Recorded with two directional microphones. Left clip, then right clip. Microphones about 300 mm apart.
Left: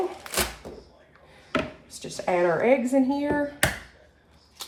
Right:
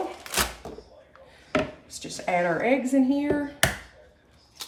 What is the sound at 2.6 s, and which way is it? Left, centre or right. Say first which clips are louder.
Speech: left 2 dB; centre.